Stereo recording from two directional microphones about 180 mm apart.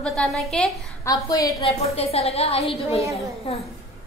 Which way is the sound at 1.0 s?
20° left (ahead or behind).